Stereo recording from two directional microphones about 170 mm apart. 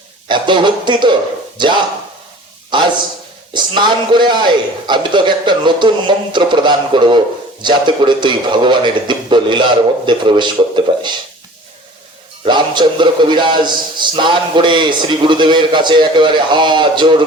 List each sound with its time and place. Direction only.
0.3 s a man's voice: 25° right (ahead or behind)
12.5 s a man's voice: 25° right (ahead or behind)